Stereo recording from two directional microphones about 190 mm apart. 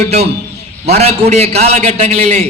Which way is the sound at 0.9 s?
35° right (ahead or behind).